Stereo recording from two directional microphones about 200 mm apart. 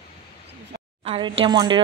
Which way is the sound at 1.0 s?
25° right (ahead or behind).